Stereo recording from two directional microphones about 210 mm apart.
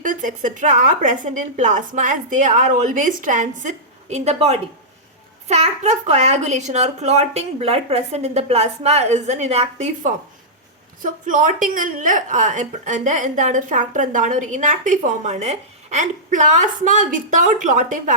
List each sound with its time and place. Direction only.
0.0 s a woman's voice: 40° right (ahead or behind)